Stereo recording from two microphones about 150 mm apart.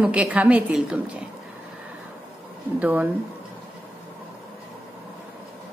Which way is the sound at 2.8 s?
10° right (ahead or behind).